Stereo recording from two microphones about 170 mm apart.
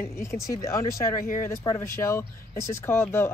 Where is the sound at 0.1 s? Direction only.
15° left (ahead or behind).